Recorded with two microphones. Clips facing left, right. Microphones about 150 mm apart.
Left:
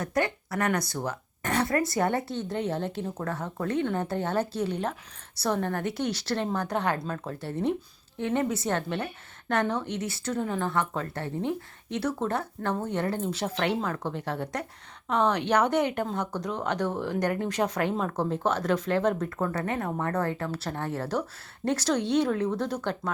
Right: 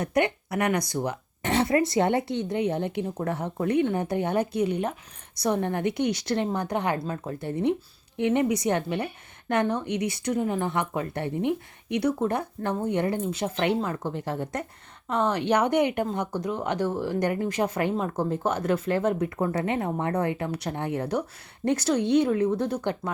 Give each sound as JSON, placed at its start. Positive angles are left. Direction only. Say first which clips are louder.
{"t": 0.0, "sound": "speech", "louder": "right 3 dB", "side_deg": -20}